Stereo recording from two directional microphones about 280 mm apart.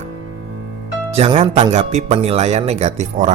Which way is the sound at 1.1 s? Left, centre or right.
Right.